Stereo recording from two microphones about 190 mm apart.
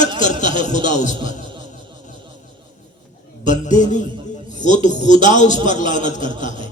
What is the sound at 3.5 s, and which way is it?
A man's voice, 40° left (ahead or behind).